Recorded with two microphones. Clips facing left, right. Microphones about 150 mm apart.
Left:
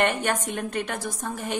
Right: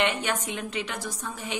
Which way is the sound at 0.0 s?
50° left (ahead or behind).